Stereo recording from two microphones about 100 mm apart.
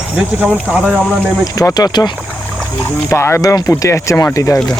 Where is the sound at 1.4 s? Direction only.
35° left (ahead or behind).